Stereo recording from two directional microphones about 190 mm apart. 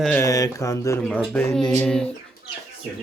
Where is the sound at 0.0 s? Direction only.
10° left (ahead or behind).